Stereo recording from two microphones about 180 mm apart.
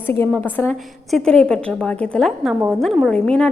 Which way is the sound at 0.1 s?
10° left (ahead or behind).